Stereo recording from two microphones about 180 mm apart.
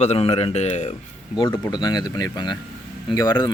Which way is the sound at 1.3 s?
25° left (ahead or behind).